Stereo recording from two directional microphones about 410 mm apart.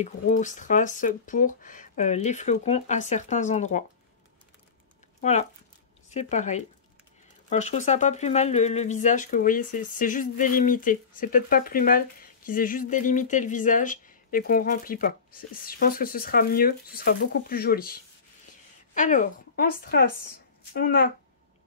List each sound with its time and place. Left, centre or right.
0.0 s speech: centre
5.2 s speech: centre
18.9 s speech: centre